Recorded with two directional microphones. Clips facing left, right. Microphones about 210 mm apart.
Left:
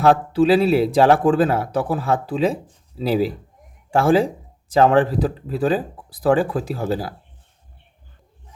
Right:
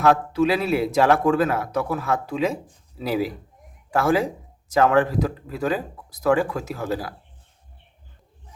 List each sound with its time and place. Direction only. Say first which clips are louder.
0.0 s a man's voice: left 3 dB; 30° left (ahead or behind)